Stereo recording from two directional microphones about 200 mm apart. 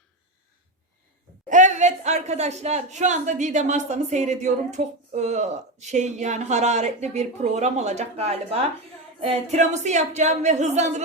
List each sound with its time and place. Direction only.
1.5 s speech: 40° right (ahead or behind)